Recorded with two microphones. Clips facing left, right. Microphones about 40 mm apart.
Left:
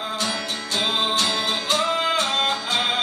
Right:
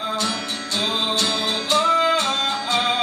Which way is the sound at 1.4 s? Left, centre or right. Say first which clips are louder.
Right 2 dB; centre.